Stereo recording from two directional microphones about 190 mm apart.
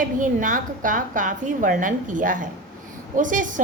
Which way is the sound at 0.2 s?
45° right (ahead or behind).